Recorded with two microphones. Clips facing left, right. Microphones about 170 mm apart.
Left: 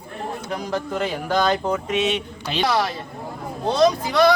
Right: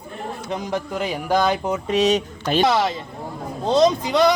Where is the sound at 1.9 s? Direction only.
40° right (ahead or behind).